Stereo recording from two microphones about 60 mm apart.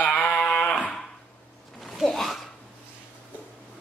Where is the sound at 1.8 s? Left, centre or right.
Centre.